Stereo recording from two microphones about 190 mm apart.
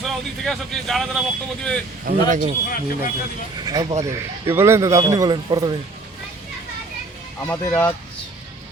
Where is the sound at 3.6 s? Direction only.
20° right (ahead or behind).